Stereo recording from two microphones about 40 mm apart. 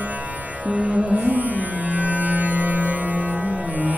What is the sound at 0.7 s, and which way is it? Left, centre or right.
Music, right.